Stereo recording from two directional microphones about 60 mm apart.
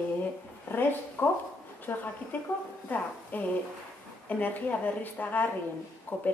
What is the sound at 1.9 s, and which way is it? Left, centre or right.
A woman's voice, left.